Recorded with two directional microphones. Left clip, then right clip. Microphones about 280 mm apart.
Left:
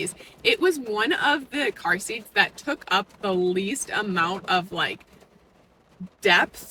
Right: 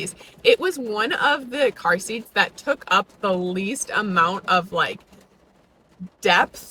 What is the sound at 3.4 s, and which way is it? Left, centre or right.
Speech, right.